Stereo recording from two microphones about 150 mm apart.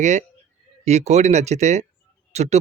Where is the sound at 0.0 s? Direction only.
50° right (ahead or behind).